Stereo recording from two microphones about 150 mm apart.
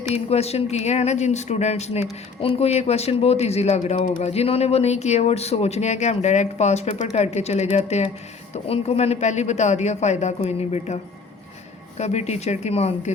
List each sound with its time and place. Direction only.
0.1 s speech: 45° left (ahead or behind)